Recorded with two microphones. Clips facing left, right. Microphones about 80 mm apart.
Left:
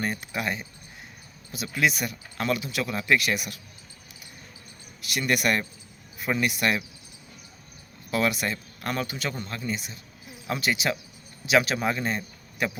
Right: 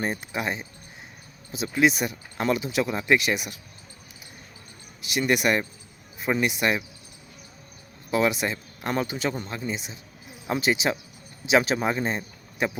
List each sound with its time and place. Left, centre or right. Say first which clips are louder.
0.0 s speech: right 1 dB; right
5.0 s speech: right 2 dB; right
8.1 s speech: right 2 dB; right